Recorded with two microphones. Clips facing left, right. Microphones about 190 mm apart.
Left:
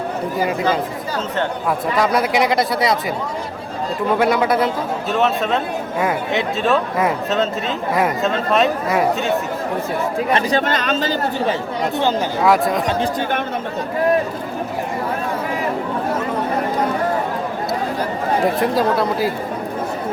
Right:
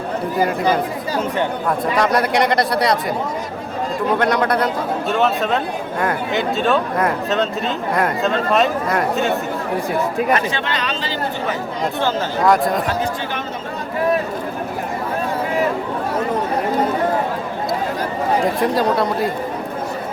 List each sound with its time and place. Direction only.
2.0 s speech: centre (ahead or behind)
4.2 s speech: 5° left (ahead or behind)
10.3 s speech: 40° left (ahead or behind)
12.4 s speech: centre (ahead or behind)
18.6 s speech: centre (ahead or behind)